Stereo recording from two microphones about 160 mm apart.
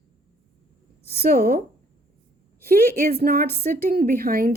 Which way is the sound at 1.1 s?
75° right (ahead or behind).